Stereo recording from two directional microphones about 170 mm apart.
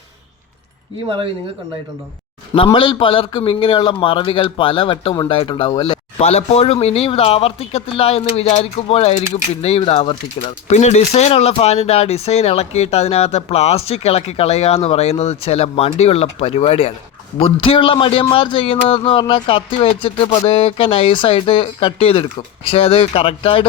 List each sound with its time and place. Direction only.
2.7 s speech: 30° left (ahead or behind)
6.2 s a man's voice: 35° left (ahead or behind)